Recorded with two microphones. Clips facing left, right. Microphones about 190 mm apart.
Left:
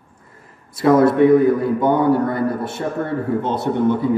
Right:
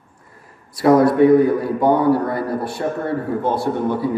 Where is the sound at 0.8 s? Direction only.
25° left (ahead or behind).